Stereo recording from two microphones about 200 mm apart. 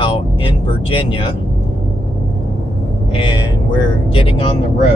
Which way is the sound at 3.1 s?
25° left (ahead or behind).